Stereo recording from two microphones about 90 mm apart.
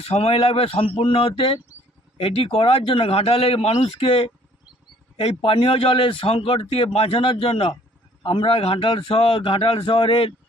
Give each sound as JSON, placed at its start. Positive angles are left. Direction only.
{"t": 0.0, "sound": "a man's voice", "side_deg": 90}
{"t": 8.2, "sound": "a man's voice", "side_deg": 60}